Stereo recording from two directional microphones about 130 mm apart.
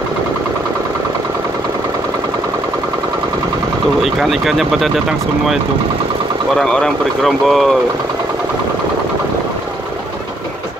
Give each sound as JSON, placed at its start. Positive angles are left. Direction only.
{"t": 4.0, "sound": "speech", "side_deg": 0}
{"t": 6.5, "sound": "speech", "side_deg": 5}